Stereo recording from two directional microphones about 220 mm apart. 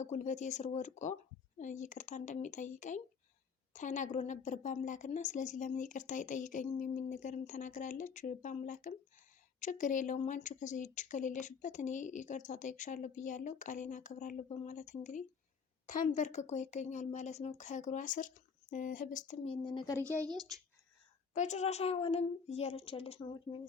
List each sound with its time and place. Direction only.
0.0 s speech: 35° left (ahead or behind)
19.6 s a woman's voice: 20° left (ahead or behind)
20.0 s speech: 10° right (ahead or behind)
21.3 s a woman's voice: 30° left (ahead or behind)